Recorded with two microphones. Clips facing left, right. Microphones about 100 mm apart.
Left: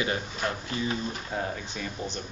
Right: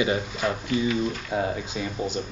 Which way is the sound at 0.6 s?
35° left (ahead or behind).